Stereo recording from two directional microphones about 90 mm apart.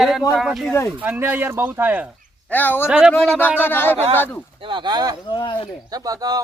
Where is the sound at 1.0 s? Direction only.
20° right (ahead or behind).